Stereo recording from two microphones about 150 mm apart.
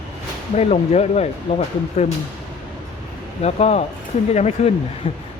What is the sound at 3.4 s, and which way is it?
Speech, 45° left (ahead or behind).